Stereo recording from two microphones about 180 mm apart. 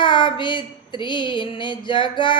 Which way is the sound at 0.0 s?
25° left (ahead or behind).